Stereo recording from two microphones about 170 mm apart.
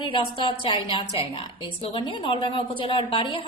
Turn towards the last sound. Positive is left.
turn(degrees=30)  # may be behind; listen again after turning